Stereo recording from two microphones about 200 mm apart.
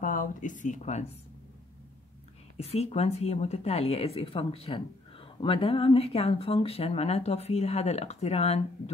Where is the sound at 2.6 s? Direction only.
30° left (ahead or behind).